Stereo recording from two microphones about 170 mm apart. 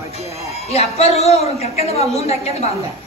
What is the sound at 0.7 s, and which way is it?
A woman's voice, 35° left (ahead or behind).